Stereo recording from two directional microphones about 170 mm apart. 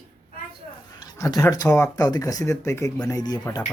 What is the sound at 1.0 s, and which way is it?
Speech, 25° left (ahead or behind).